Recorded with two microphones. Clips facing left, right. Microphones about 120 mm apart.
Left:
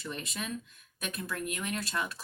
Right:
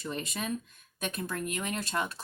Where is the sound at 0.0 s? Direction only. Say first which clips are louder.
Right 3 dB; 35° right (ahead or behind).